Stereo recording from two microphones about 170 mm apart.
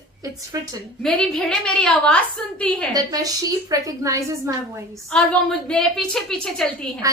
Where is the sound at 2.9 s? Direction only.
20° right (ahead or behind).